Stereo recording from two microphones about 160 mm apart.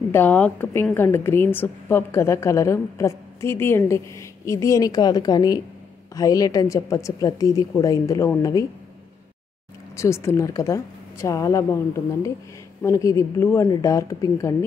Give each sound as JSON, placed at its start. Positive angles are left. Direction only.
{"t": 0.1, "sound": "a woman's voice", "side_deg": 10}
{"t": 9.9, "sound": "a woman's voice", "side_deg": 15}